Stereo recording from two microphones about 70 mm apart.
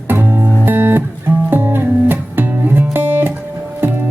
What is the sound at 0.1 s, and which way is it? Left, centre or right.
Music, right.